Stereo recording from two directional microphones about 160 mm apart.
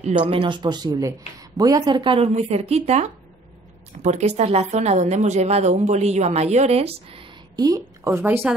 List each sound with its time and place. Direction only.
0.2 s a woman's voice: 30° right (ahead or behind)
7.6 s speech: 20° right (ahead or behind)